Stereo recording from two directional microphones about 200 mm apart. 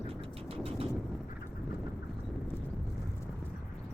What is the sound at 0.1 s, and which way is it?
Vehicle, 30° right (ahead or behind).